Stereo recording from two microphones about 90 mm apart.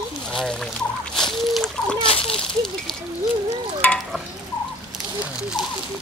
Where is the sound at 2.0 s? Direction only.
90° left.